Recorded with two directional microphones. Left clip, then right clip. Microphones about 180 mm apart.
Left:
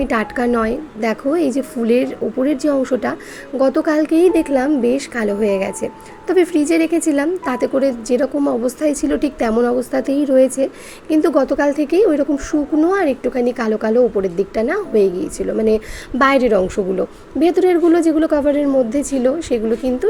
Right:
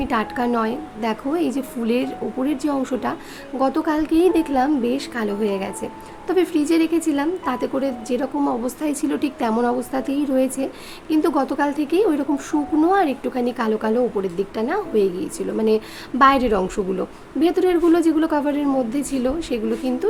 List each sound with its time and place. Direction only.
0.0 s a woman's voice: 15° left (ahead or behind)